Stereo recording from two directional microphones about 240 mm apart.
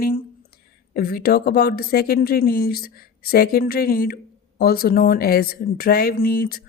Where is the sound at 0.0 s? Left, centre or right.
Left.